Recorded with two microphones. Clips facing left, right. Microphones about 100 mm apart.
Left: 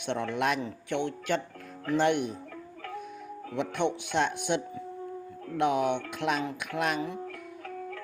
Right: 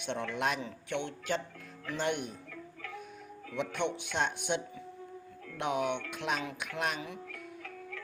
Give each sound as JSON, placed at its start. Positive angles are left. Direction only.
{"t": 0.0, "sound": "speech", "side_deg": 55}
{"t": 3.5, "sound": "speech", "side_deg": 50}